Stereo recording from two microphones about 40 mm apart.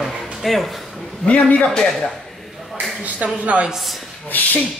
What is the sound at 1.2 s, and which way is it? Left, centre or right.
Speech, left.